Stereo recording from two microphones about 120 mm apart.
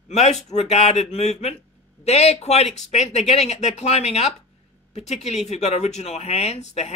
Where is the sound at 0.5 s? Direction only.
65° left (ahead or behind).